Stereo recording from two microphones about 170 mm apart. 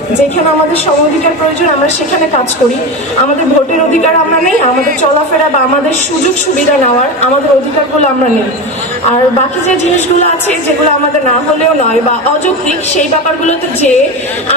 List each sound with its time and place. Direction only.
13.5 s a woman's voice: 40° left (ahead or behind)